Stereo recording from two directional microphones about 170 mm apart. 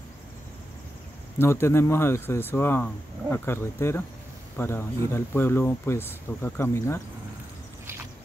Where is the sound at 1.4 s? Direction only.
15° left (ahead or behind).